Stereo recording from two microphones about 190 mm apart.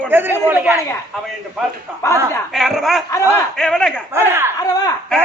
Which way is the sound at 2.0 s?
15° left (ahead or behind).